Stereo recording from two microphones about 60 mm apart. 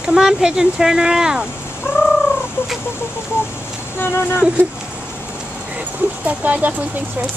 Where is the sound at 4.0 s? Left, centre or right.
Left.